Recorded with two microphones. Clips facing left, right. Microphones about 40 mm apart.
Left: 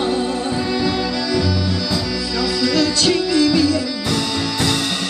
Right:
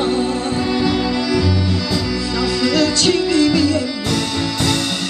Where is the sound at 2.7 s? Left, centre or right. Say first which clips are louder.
Right 1 dB; centre.